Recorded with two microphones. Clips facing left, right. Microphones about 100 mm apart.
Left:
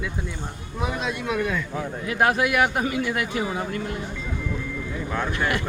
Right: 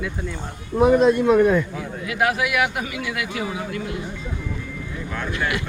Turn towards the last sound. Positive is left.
turn(degrees=40)  # may be behind; listen again after turning